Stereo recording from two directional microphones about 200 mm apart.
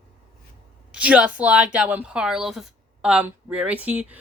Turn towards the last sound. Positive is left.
turn(degrees=-5)  # may be behind; listen again after turning